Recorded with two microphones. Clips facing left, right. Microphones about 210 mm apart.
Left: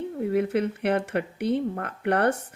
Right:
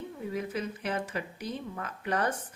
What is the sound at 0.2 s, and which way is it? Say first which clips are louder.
Speech: left 10 dB; 65° left (ahead or behind).